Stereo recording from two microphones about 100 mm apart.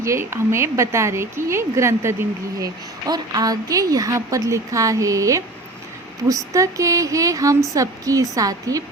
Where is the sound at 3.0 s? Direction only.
40° right (ahead or behind).